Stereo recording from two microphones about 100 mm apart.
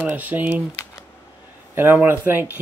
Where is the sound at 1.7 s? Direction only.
20° right (ahead or behind).